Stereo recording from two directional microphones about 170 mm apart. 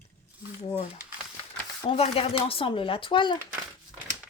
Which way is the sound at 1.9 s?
35° left (ahead or behind).